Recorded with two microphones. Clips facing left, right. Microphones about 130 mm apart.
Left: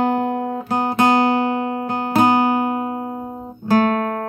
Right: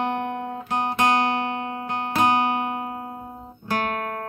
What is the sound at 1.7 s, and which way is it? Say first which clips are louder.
Music: left 7 dB; 35° left (ahead or behind).